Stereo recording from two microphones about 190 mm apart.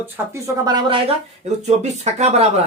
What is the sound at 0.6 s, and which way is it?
Speech, 20° right (ahead or behind).